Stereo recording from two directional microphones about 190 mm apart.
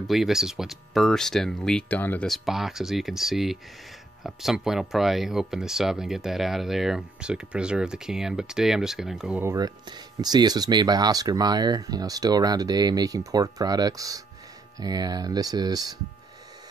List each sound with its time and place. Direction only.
0.0 s speech: centre (ahead or behind)
9.4 s speech: 15° right (ahead or behind)